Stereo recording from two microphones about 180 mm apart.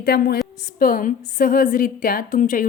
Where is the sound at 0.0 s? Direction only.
60° left (ahead or behind).